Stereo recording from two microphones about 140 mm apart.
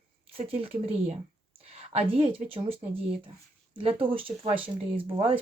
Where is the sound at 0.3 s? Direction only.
45° right (ahead or behind).